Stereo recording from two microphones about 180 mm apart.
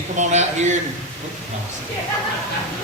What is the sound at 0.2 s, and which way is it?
Speech, 40° right (ahead or behind).